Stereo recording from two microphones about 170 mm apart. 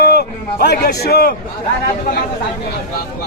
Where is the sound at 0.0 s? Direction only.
70° left (ahead or behind).